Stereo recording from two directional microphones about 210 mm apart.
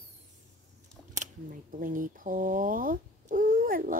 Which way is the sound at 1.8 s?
40° right (ahead or behind).